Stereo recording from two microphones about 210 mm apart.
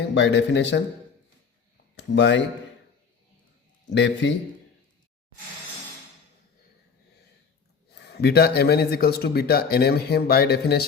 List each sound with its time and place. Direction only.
0.1 s a man's voice: 60° left (ahead or behind)
2.0 s speech: 55° left (ahead or behind)
3.8 s a man's voice: 55° left (ahead or behind)
7.9 s speech: 50° left (ahead or behind)